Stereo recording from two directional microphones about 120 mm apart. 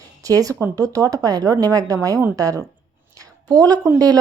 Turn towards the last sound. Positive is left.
turn(degrees=-30)  # may be behind; listen again after turning